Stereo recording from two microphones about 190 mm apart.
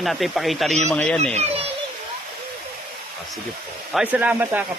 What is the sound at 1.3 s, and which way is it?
Speech, 30° right (ahead or behind).